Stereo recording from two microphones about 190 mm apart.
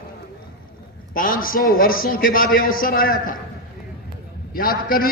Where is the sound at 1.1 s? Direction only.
50° left (ahead or behind).